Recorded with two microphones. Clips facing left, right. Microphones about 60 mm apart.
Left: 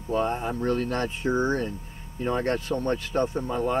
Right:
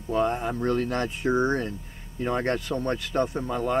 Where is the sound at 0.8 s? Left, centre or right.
Right.